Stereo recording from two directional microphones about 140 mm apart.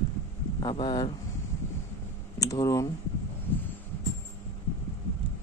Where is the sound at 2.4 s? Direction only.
25° left (ahead or behind).